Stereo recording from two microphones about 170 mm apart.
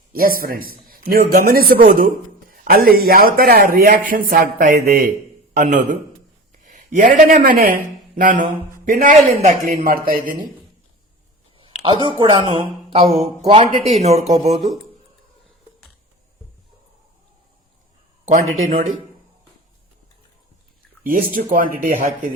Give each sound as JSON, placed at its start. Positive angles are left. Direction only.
{"t": 0.1, "sound": "a man's voice", "side_deg": -55}
{"t": 6.5, "sound": "a sound", "side_deg": -50}
{"t": 7.4, "sound": "speech", "side_deg": -60}
{"t": 9.5, "sound": "speech", "side_deg": -40}
{"t": 9.8, "sound": "a man's voice", "side_deg": -55}
{"t": 11.6, "sound": "speech", "side_deg": -30}
{"t": 18.3, "sound": "speech", "side_deg": -50}
{"t": 21.0, "sound": "a man's voice", "side_deg": -55}